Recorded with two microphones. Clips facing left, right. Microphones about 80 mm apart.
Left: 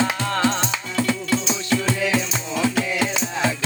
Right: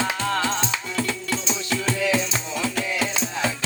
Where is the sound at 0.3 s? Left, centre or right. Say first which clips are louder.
Left 3 dB; centre.